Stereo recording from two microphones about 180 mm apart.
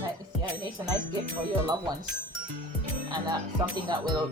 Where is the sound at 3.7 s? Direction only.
25° right (ahead or behind).